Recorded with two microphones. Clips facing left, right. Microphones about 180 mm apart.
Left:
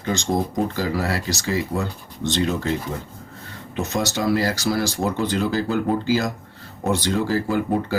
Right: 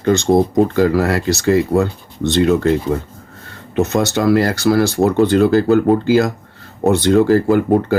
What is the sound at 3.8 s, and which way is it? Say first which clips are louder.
Speech: right 8 dB; 60° right (ahead or behind).